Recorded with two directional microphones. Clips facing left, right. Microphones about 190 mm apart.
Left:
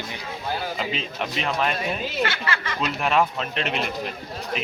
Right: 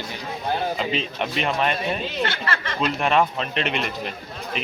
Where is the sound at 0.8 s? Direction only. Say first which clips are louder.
Right 3 dB; centre (ahead or behind).